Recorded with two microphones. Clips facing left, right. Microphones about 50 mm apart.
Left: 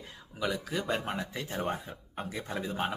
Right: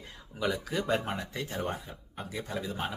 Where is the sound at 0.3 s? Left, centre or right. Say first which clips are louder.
Right 1 dB; centre.